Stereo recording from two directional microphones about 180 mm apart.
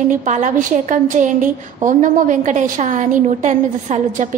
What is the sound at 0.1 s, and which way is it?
A woman's voice, 45° right (ahead or behind).